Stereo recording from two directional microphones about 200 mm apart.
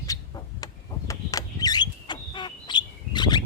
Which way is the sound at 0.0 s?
20° left (ahead or behind).